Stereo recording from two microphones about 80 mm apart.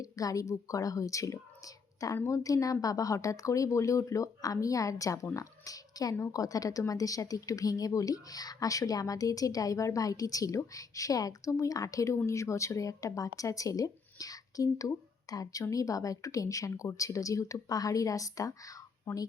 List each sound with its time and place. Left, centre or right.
0.0 s a woman's voice: left